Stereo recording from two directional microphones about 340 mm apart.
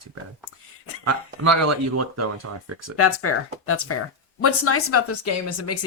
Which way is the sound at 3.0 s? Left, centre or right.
Left.